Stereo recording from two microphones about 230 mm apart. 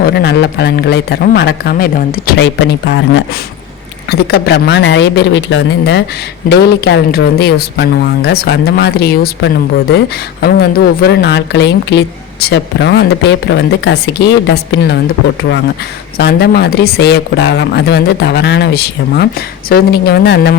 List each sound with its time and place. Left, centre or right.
0.0 s a woman's voice: left
16.1 s a woman's voice: left